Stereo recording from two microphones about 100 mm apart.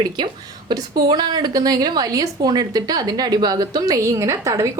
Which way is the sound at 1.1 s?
45° right (ahead or behind).